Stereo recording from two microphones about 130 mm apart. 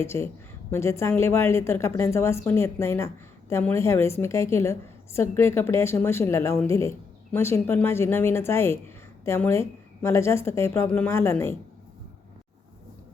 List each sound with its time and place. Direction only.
0.0 s a woman's voice: 20° left (ahead or behind)